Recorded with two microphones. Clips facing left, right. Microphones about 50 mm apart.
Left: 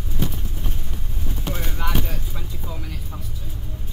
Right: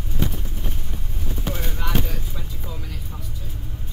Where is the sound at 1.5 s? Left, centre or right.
Left.